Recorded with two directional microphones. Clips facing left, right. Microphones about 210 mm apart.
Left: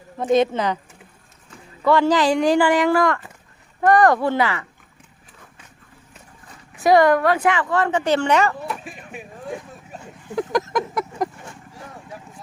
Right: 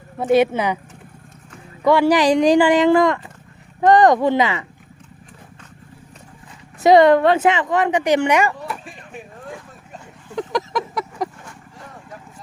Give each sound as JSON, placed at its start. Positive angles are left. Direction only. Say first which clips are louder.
{"t": 0.2, "sound": "speech", "louder": "right 2 dB", "side_deg": -10}
{"t": 1.8, "sound": "speech", "louder": "right 2 dB", "side_deg": -15}
{"t": 6.8, "sound": "speech", "louder": "right 3 dB", "side_deg": -25}
{"t": 8.7, "sound": "a sound", "louder": "even", "side_deg": 5}
{"t": 9.9, "sound": "vehicle", "louder": "left 2 dB", "side_deg": 5}